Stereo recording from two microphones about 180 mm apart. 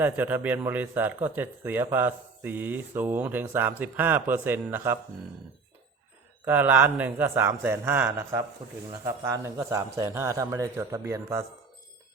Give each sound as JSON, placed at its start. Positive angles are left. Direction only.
{"t": 0.0, "sound": "speech", "side_deg": -10}
{"t": 6.4, "sound": "speech", "side_deg": -10}